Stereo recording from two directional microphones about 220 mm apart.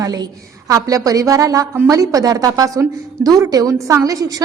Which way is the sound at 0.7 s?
15° right (ahead or behind).